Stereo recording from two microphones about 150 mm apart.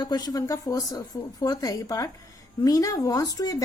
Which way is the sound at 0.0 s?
25° left (ahead or behind).